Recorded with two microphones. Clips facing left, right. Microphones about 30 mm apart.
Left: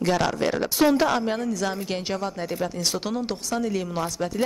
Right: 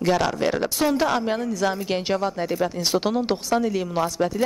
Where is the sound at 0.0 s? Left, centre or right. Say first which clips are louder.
Right 2 dB; centre; by 3.6 s right.